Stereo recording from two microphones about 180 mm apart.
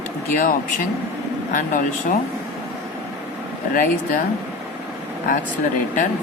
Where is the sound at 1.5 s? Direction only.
45° left (ahead or behind).